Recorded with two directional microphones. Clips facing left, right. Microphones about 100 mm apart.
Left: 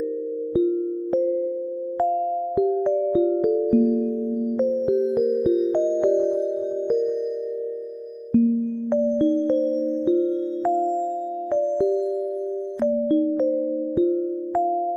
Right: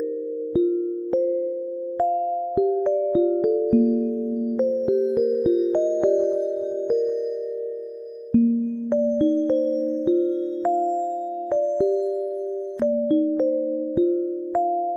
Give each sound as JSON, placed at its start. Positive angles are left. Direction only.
{"t": 3.8, "sound": "music", "side_deg": -15}
{"t": 5.9, "sound": "music", "side_deg": -15}